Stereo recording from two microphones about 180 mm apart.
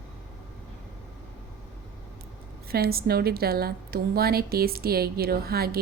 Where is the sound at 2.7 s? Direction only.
60° right (ahead or behind).